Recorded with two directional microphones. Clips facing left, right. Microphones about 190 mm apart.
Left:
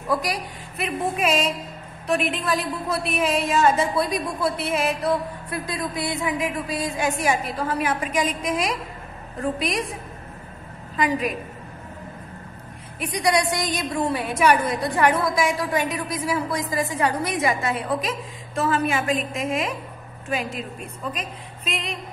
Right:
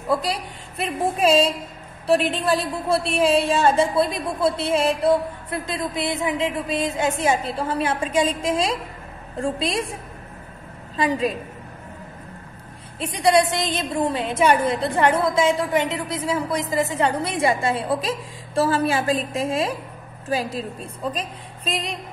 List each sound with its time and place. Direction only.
0.7 s a woman's voice: 30° right (ahead or behind)
11.0 s a woman's voice: 30° right (ahead or behind)
13.0 s a woman's voice: 25° right (ahead or behind)